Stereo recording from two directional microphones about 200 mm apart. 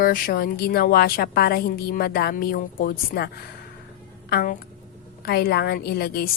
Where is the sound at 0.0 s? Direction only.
45° left (ahead or behind).